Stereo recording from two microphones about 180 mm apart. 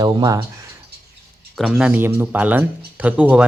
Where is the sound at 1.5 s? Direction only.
Centre (ahead or behind).